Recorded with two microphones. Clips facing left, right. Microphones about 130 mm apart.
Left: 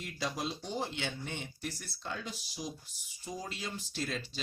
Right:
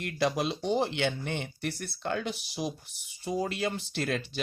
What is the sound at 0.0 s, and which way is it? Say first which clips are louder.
Speech: right 8 dB; 70° right (ahead or behind).